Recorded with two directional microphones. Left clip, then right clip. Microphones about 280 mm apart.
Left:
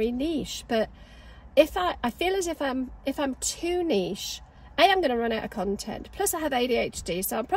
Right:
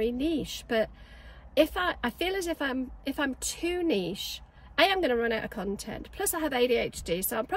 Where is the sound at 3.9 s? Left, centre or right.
Centre.